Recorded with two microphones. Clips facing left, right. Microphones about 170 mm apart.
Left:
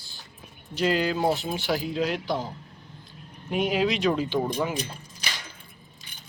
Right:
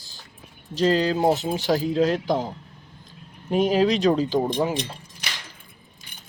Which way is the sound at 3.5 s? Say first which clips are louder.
Right 5 dB; 40° right (ahead or behind).